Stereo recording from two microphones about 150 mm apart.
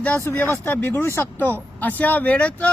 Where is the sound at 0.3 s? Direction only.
15° left (ahead or behind).